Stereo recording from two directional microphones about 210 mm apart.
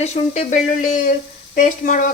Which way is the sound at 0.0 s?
30° left (ahead or behind).